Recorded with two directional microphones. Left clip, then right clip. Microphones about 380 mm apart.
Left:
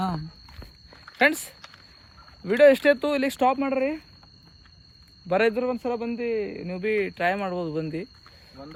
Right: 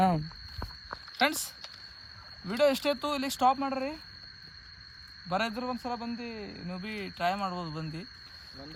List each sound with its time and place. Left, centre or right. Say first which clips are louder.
2.5 s a man's voice: left 10 dB; centre
5.3 s a man's voice: left 9 dB; centre